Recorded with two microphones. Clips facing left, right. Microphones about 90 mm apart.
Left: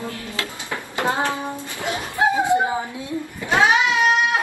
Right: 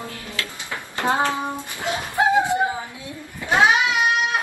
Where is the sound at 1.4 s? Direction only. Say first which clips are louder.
Even; 20° right (ahead or behind).